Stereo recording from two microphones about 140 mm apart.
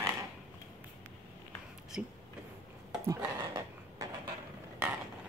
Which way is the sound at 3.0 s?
25° right (ahead or behind).